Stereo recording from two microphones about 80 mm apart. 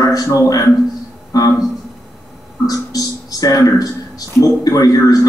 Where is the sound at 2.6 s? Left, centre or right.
Left.